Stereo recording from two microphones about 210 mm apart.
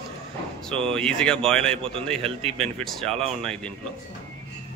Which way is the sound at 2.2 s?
30° right (ahead or behind).